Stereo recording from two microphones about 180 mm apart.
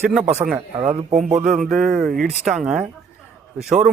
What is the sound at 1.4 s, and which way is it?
A man's voice, centre (ahead or behind).